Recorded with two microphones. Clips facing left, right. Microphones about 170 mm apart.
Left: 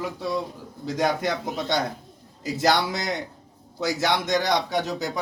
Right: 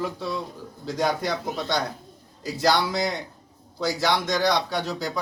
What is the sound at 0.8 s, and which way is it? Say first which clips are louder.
Speech: left 1 dB; 20° left (ahead or behind).